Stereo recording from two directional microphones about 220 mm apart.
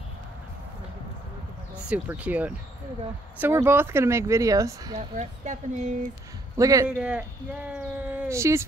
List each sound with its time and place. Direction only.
1.9 s speech: 5° right (ahead or behind)
4.9 s speech: 35° right (ahead or behind)
6.5 s speech: 15° right (ahead or behind)